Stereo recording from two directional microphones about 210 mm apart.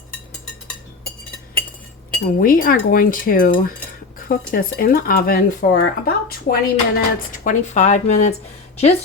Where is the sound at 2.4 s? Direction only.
40° left (ahead or behind).